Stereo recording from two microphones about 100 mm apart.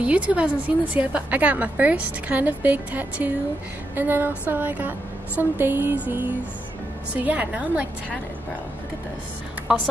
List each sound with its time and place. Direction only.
0.0 s a woman's voice: 15° right (ahead or behind)
7.2 s a woman's voice: 15° right (ahead or behind)